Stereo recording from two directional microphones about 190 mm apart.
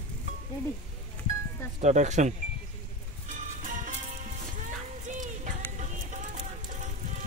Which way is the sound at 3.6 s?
45° right (ahead or behind).